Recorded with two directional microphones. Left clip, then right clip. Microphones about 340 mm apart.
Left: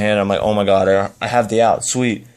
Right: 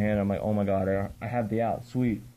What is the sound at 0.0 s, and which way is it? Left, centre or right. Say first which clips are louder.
Speech: left 13 dB; centre.